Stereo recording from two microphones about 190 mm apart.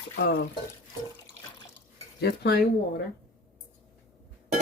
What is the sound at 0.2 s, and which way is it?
Speech, 55° left (ahead or behind).